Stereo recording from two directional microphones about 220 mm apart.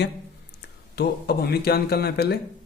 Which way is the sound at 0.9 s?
45° left (ahead or behind).